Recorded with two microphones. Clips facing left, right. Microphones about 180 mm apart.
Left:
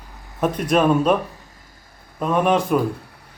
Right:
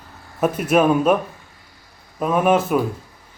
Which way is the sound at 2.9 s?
65° left (ahead or behind).